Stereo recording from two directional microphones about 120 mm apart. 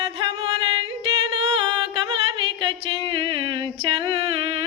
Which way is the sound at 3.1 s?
45° right (ahead or behind).